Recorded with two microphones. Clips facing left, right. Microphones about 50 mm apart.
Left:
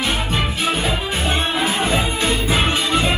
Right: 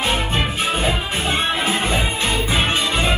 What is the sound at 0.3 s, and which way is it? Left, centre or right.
Music, right.